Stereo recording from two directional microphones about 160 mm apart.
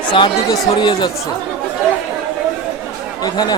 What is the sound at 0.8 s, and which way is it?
Speech, 30° left (ahead or behind).